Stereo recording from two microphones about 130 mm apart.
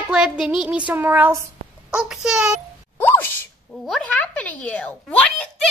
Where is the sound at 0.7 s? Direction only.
10° right (ahead or behind).